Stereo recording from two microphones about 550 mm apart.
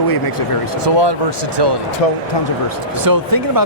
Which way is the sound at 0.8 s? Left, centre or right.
Right.